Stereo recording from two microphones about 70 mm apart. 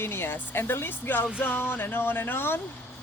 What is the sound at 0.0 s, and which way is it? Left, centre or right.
Speech, left.